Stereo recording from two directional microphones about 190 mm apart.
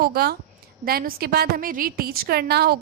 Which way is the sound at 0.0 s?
55° right (ahead or behind).